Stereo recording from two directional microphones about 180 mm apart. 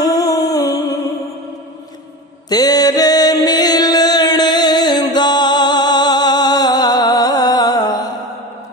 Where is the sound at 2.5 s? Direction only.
20° left (ahead or behind).